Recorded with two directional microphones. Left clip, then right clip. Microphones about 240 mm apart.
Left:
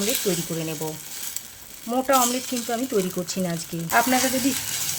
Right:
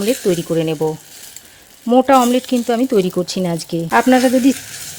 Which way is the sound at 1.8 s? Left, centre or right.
Right.